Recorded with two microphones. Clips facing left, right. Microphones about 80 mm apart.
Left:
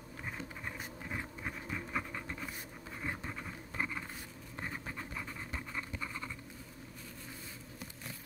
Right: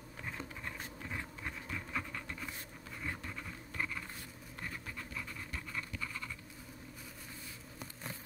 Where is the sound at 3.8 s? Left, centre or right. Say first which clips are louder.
Left 2 dB; centre.